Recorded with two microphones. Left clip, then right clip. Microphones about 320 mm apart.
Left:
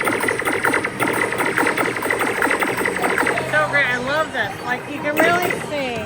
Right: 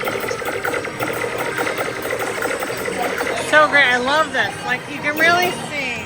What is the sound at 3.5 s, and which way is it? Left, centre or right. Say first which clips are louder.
Speech: right 8 dB; centre.